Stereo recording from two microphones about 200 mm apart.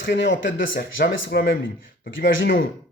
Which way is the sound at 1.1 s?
60° left (ahead or behind).